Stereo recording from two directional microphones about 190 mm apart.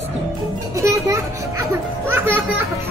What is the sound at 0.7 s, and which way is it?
Children playing, 15° right (ahead or behind).